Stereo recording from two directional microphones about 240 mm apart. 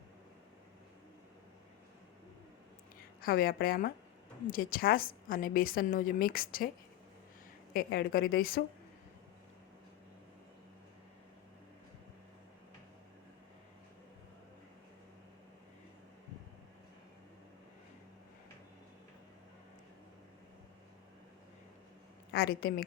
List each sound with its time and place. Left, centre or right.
3.2 s a woman's voice: left
7.7 s a woman's voice: left
22.3 s a sound: left